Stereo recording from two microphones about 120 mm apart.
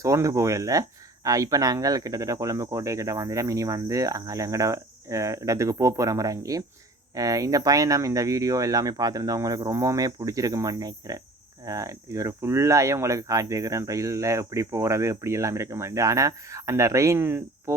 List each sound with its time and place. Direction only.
0.0 s speech: 25° right (ahead or behind)